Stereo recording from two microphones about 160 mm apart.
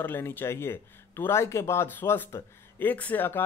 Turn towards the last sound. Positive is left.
turn(degrees=10)  # may be behind; listen again after turning